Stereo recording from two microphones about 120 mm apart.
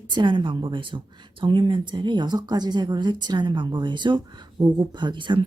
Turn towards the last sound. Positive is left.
turn(degrees=-40)  # may be behind; listen again after turning